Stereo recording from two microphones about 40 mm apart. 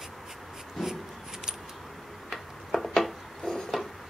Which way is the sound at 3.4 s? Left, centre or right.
Centre.